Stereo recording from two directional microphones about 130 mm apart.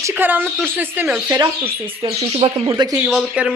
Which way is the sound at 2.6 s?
30° right (ahead or behind).